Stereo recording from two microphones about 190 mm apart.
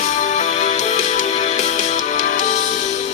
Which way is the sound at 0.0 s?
40° left (ahead or behind).